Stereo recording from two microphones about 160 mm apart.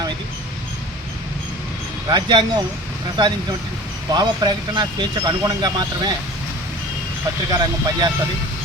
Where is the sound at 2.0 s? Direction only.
25° right (ahead or behind).